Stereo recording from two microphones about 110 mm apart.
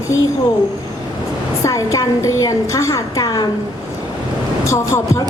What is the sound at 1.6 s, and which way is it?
A woman's voice, 30° left (ahead or behind).